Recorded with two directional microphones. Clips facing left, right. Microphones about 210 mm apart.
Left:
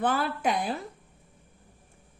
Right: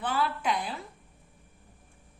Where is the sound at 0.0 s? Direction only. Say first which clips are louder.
Left 3 dB; 50° left (ahead or behind).